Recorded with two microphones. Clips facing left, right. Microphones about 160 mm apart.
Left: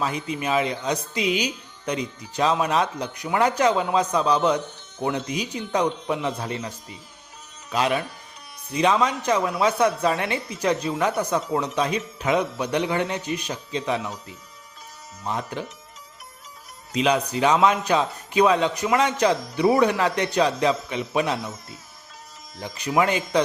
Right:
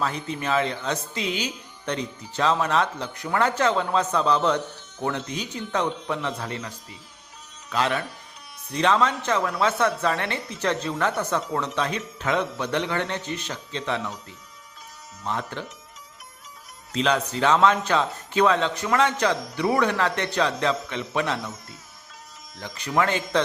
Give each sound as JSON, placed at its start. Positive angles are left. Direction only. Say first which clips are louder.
{"t": 0.0, "sound": "speech", "louder": "left 1 dB", "side_deg": 10}
{"t": 16.9, "sound": "speech", "louder": "left 2 dB", "side_deg": 15}
{"t": 22.5, "sound": "speech", "louder": "left 2 dB", "side_deg": 15}